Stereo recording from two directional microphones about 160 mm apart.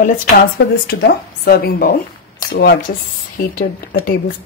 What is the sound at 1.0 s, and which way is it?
Speech, 85° left.